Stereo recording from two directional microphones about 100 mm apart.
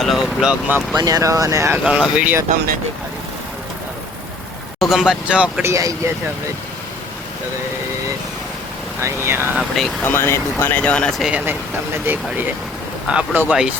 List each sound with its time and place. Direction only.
0.0 s speech: centre (ahead or behind)
0.9 s speech: 40° right (ahead or behind)
1.8 s speech: 10° right (ahead or behind)
4.8 s speech: 5° right (ahead or behind)
5.6 s speech: 30° right (ahead or behind)
9.0 s speech: 25° right (ahead or behind)
9.6 s speech: centre (ahead or behind)
10.0 s speech: 20° left (ahead or behind)
11.2 s speech: 10° right (ahead or behind)
12.1 s speech: 20° right (ahead or behind)
13.1 s speech: 10° right (ahead or behind)